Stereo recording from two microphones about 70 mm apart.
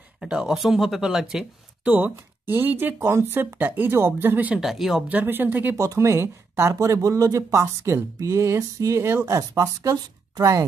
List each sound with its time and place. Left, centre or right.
0.2 s speech: centre
1.9 s speech: right
4.6 s speech: centre
5.0 s speech: right
5.8 s speech: right